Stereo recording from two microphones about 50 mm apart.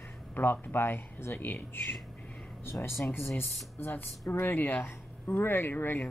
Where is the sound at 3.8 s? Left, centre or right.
Left.